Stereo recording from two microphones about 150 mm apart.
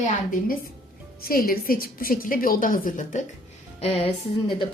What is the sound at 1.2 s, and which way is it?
A woman's voice, 75° left (ahead or behind).